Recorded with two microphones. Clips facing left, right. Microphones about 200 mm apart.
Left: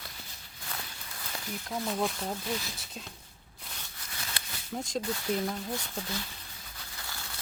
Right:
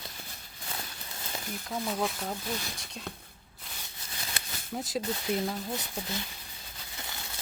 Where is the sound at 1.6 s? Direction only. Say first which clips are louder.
Even; centre (ahead or behind).